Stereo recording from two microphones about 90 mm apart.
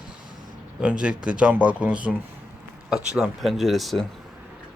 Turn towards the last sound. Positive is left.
turn(degrees=0)  # may be behind; listen again after turning